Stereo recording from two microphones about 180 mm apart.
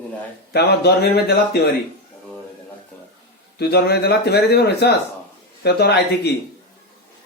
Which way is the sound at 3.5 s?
65° left (ahead or behind).